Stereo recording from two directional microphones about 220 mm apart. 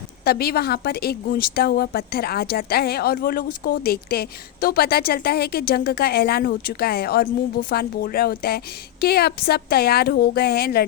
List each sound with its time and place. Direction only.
0.3 s a woman's voice: 45° left (ahead or behind)